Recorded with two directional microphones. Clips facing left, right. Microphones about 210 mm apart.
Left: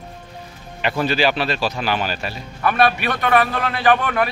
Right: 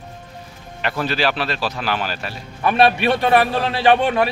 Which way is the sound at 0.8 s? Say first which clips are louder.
Left 2 dB; centre (ahead or behind).